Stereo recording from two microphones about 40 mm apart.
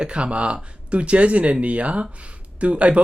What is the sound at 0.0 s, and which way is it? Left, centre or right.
Speech, right.